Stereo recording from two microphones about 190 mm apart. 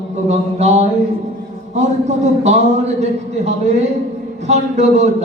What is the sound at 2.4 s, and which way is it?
Speech, 35° right (ahead or behind).